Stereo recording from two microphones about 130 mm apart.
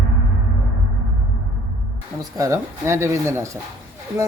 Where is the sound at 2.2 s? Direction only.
25° right (ahead or behind).